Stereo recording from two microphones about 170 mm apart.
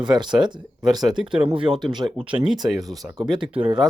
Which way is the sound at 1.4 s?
30° right (ahead or behind).